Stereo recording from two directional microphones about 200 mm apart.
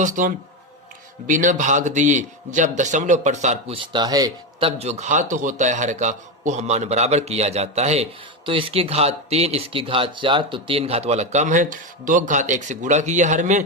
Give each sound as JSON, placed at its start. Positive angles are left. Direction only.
{"t": 0.0, "sound": "speech", "side_deg": -40}
{"t": 3.9, "sound": "speech", "side_deg": -20}
{"t": 4.8, "sound": "speech", "side_deg": -35}